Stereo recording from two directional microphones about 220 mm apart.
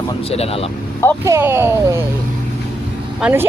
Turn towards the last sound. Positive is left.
turn(degrees=-10)  # may be behind; listen again after turning